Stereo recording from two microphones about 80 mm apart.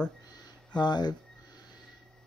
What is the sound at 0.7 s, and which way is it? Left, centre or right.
Speech, left.